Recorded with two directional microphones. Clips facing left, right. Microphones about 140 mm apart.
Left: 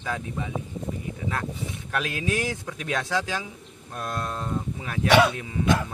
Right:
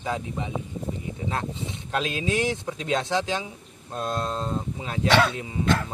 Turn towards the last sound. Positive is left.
turn(degrees=15)  # may be behind; listen again after turning